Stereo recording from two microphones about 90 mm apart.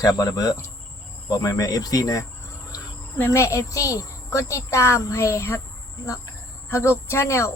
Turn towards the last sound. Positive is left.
turn(degrees=30)  # may be behind; listen again after turning